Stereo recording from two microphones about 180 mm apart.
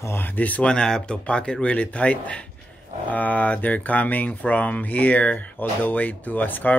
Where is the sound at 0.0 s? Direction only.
10° left (ahead or behind).